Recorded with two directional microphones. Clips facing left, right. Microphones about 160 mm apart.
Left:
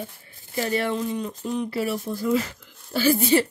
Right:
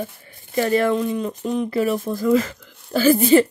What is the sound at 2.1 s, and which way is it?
Speech, 90° right.